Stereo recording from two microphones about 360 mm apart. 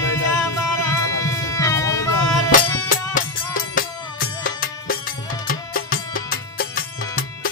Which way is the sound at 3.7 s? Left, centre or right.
Left.